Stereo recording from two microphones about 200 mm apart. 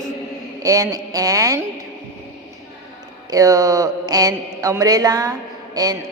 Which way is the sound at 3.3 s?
15° right (ahead or behind).